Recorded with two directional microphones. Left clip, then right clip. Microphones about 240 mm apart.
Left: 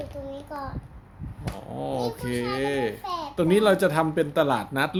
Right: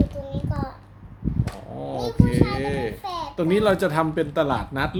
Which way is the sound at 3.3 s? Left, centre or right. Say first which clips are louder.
Even; centre.